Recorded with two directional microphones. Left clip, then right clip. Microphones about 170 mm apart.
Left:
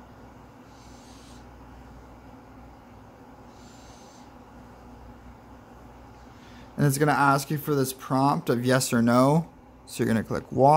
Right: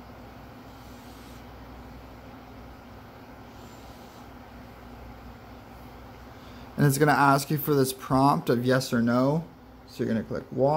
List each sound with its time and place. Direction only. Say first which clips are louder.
6.8 s speech: right 1 dB; 5° left (ahead or behind)
8.6 s speech: left 2 dB; 30° left (ahead or behind)